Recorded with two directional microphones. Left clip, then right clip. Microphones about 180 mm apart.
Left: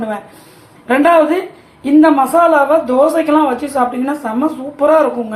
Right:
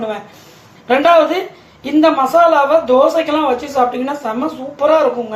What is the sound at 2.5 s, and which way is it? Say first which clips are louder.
Speech: even; 20° left (ahead or behind).